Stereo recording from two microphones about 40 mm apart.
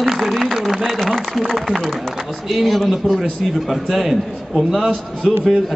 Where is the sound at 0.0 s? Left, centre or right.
Centre.